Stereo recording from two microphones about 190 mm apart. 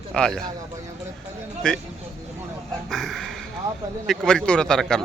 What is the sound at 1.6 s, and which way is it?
Speech, 5° left (ahead or behind).